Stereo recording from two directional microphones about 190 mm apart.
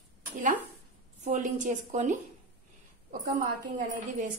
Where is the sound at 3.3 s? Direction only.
45° right (ahead or behind).